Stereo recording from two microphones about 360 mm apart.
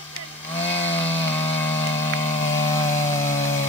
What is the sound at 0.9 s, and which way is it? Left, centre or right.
Chainsaw, centre.